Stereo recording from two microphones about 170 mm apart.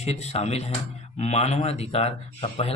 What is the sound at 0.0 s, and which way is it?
A man's voice, 40° left (ahead or behind).